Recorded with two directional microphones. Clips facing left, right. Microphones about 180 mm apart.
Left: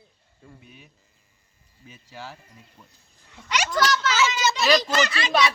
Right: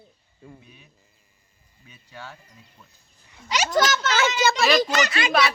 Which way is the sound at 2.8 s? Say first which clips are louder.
Left 1 dB; 15° left (ahead or behind).